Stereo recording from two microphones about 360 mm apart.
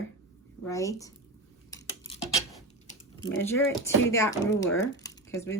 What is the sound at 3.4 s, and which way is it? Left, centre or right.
Speech, centre.